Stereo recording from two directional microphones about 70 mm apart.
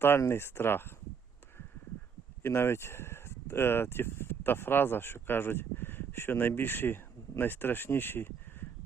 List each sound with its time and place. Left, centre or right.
0.2 s speech: left
2.4 s speech: left